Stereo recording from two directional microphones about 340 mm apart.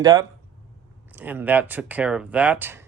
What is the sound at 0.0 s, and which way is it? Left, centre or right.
Speech, centre.